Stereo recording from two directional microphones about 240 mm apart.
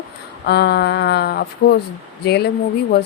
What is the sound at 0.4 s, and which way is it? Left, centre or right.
Speech, left.